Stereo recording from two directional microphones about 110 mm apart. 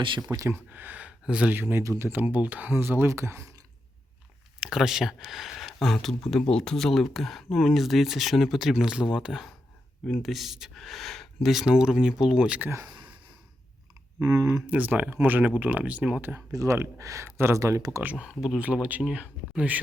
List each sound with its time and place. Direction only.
0.2 s speech: 30° right (ahead or behind)
0.7 s speech: 15° right (ahead or behind)
4.6 s speech: 5° right (ahead or behind)
14.2 s speech: 25° right (ahead or behind)
14.7 s speech: 15° right (ahead or behind)
16.5 s speech: 30° right (ahead or behind)
18.0 s speech: 10° right (ahead or behind)